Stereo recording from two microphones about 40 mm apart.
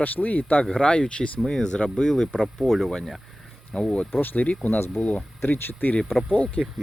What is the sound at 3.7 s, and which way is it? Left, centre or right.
Speech, left.